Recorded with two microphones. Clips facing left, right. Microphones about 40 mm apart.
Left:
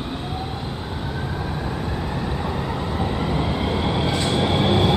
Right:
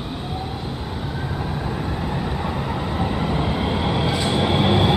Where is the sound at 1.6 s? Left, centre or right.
Centre.